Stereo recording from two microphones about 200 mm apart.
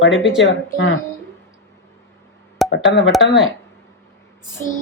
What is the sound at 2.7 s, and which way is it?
Speech, 65° left (ahead or behind).